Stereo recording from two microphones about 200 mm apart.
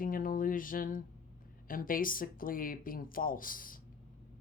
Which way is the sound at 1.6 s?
45° left (ahead or behind).